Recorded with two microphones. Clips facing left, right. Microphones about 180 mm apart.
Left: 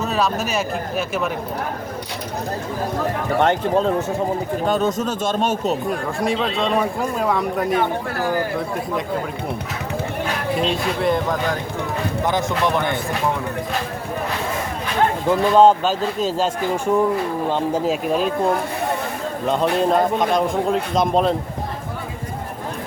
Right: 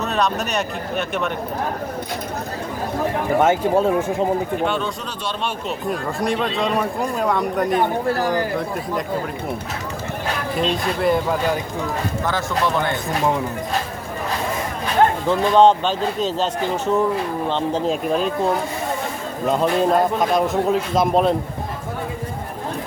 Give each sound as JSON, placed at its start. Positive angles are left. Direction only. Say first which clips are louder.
{"t": 0.0, "sound": "speech", "louder": "even", "side_deg": 0}
{"t": 3.3, "sound": "speech", "louder": "right 1 dB", "side_deg": -5}
{"t": 4.6, "sound": "speech", "louder": "left 4 dB", "side_deg": 40}
{"t": 5.9, "sound": "speech", "louder": "even", "side_deg": 0}
{"t": 10.5, "sound": "speech", "louder": "even", "side_deg": 0}
{"t": 12.2, "sound": "speech", "louder": "left 2 dB", "side_deg": 20}
{"t": 15.3, "sound": "speech", "louder": "left 2 dB", "side_deg": 5}